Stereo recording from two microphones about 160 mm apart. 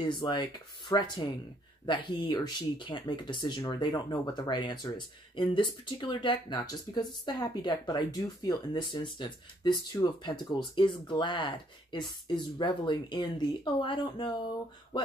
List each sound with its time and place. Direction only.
0.1 s speech: 30° left (ahead or behind)